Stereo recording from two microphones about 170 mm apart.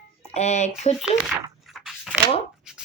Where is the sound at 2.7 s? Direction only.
5° right (ahead or behind).